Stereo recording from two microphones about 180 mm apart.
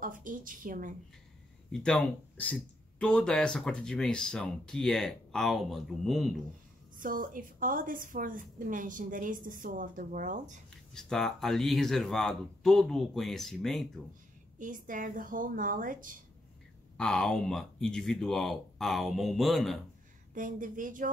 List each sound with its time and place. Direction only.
0.0 s a woman's voice: 50° right (ahead or behind)
1.7 s speech: 5° left (ahead or behind)
7.0 s a woman's voice: 50° right (ahead or behind)
10.9 s speech: 5° left (ahead or behind)
14.6 s a woman's voice: 45° right (ahead or behind)
16.9 s speech: 5° left (ahead or behind)
20.3 s a woman's voice: 45° right (ahead or behind)